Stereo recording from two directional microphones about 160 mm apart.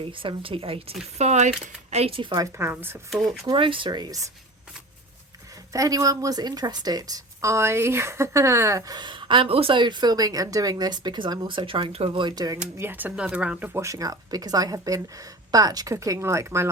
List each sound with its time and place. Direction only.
0.0 s a woman's voice: 35° right (ahead or behind)
2.6 s speech: 15° right (ahead or behind)
3.2 s a woman's voice: 25° right (ahead or behind)
5.7 s a woman's voice: 20° right (ahead or behind)
12.7 s a woman's voice: 15° right (ahead or behind)